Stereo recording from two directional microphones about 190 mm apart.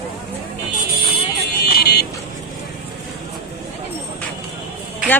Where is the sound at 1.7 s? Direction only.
60° left (ahead or behind).